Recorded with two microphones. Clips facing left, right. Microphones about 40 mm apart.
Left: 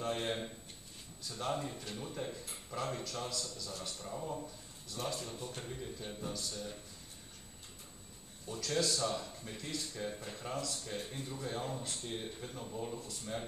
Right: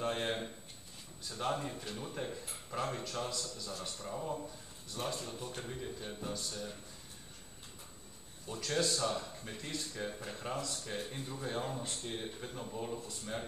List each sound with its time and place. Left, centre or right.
0.1 s a man's voice: centre
8.5 s speech: centre